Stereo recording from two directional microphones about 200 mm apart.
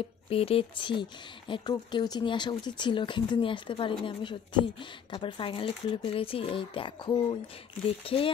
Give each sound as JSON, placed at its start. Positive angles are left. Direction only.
{"t": 0.3, "sound": "speech", "side_deg": 30}